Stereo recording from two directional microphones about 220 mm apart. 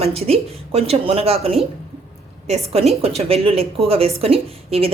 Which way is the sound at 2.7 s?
25° right (ahead or behind).